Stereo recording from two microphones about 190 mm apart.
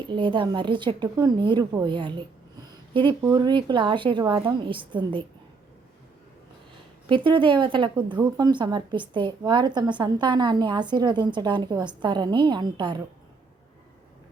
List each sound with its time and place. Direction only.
0.1 s a woman's voice: 25° right (ahead or behind)
7.3 s a woman's voice: 25° right (ahead or behind)